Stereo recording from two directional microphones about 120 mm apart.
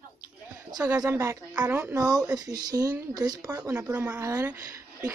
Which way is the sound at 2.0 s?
30° right (ahead or behind).